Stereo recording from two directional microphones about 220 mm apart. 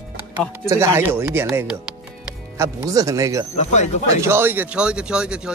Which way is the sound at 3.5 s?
30° left (ahead or behind).